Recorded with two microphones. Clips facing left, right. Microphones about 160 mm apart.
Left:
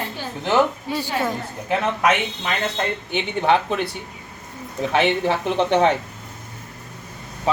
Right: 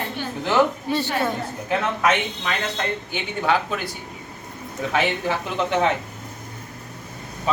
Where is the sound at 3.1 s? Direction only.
25° left (ahead or behind).